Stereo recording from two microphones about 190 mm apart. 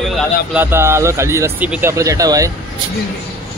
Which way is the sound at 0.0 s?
Centre (ahead or behind).